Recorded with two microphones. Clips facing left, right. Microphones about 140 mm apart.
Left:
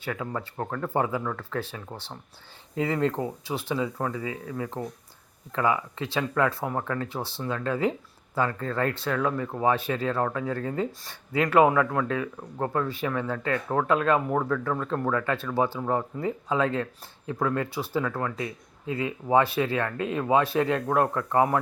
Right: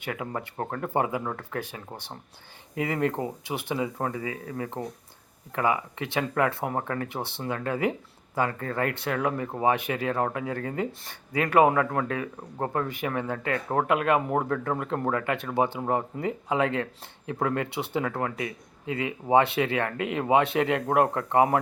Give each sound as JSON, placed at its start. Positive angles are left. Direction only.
{"t": 0.0, "sound": "speech", "side_deg": -20}
{"t": 4.4, "sound": "speech", "side_deg": -30}
{"t": 5.5, "sound": "speech", "side_deg": -20}